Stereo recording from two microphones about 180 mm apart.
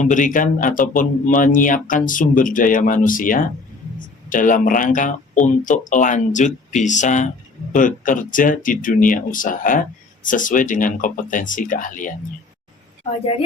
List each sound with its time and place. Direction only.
0.0 s speech: 45° left (ahead or behind)